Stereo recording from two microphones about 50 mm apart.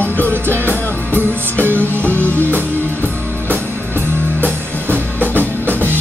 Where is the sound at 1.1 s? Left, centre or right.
Right.